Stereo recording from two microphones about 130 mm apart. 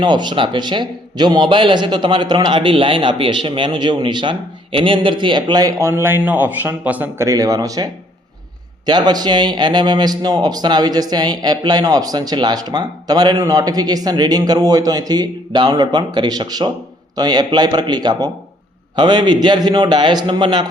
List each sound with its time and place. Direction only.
0.0 s speech: 35° right (ahead or behind); by 7.3 s 15° right (ahead or behind)
7.3 s speech: 25° right (ahead or behind)
8.9 s speech: 30° right (ahead or behind)